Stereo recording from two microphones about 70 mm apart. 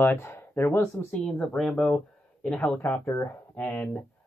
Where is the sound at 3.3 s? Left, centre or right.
Left.